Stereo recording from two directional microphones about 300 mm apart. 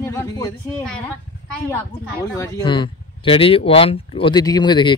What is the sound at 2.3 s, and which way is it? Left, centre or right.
Speech, centre.